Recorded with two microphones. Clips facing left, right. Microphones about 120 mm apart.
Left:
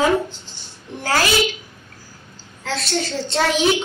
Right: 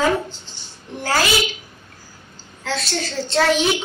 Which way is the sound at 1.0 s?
Centre (ahead or behind).